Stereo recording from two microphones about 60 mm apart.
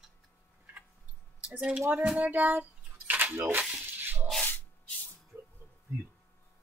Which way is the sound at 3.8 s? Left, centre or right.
Right.